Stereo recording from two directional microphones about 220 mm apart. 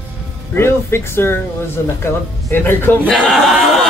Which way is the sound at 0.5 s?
10° left (ahead or behind).